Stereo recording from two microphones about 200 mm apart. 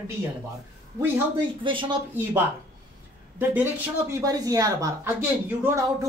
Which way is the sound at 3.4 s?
10° right (ahead or behind).